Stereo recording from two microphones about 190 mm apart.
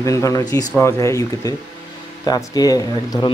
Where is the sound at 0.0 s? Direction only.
15° left (ahead or behind).